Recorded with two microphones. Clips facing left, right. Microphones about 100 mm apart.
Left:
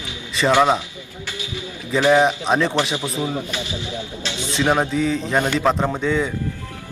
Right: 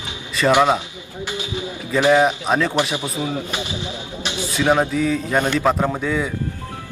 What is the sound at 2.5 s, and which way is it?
Speech, centre (ahead or behind).